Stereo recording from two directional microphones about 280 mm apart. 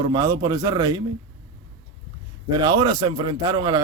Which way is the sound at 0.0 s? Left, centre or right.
Centre.